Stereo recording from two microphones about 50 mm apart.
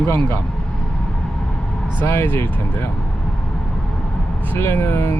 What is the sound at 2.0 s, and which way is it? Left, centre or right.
Speech, left.